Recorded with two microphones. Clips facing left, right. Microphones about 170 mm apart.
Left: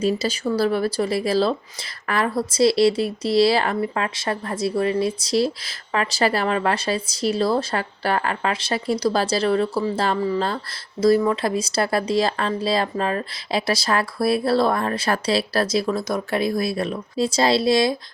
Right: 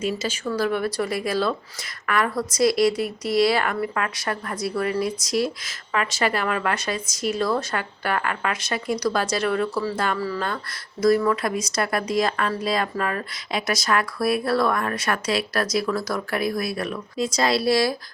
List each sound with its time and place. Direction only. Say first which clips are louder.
0.0 s a woman's voice: left 4 dB; 35° left (ahead or behind)